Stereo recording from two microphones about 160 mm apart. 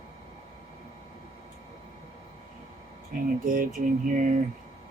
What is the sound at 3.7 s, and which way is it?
Speech, 55° right (ahead or behind).